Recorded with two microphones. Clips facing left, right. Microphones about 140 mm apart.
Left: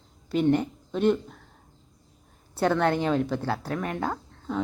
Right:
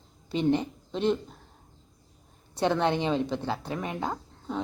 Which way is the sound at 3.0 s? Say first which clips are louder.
Left 2 dB; centre (ahead or behind).